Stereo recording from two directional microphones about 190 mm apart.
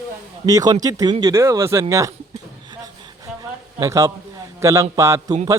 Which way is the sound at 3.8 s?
20° right (ahead or behind).